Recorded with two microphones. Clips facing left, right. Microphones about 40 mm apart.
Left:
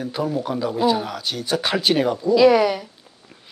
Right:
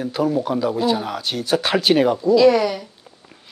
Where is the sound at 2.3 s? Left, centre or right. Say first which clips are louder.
Left 1 dB; centre.